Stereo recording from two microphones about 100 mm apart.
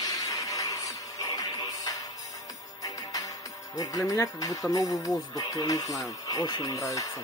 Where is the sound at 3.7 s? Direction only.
35° left (ahead or behind).